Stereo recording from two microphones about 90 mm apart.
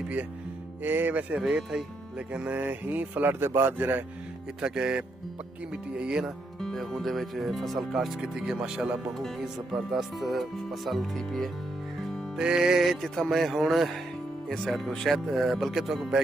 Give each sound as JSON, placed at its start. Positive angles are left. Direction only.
{"t": 0.8, "sound": "speech", "side_deg": -20}
{"t": 1.3, "sound": "speech", "side_deg": -10}
{"t": 4.6, "sound": "speech", "side_deg": -10}
{"t": 6.6, "sound": "speech", "side_deg": 0}
{"t": 12.4, "sound": "speech", "side_deg": -10}